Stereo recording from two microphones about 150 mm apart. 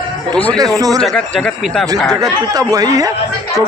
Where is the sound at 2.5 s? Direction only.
25° right (ahead or behind).